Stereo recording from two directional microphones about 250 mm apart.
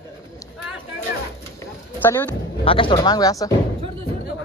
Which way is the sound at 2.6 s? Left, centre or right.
Left.